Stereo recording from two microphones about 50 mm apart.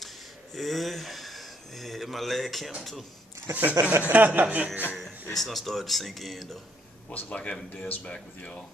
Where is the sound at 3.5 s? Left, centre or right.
Right.